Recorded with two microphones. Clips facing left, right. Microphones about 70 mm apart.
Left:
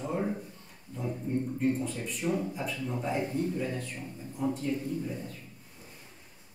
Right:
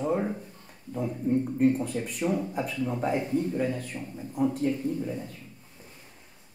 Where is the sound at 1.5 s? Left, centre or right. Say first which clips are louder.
Right 5 dB; right.